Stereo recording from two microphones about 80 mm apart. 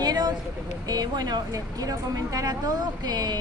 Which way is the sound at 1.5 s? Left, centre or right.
Right.